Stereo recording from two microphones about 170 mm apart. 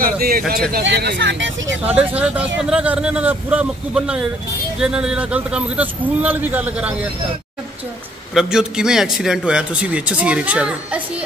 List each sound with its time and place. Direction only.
0.0 s speech: 60° right (ahead or behind)
0.7 s speech: 70° right (ahead or behind); by 1.8 s 90° right
1.8 s a man's voice: 10° right (ahead or behind)
8.4 s a man's voice: 5° right (ahead or behind)